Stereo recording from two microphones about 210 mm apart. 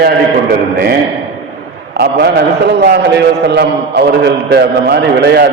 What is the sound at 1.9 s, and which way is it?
A man's voice, 50° right (ahead or behind).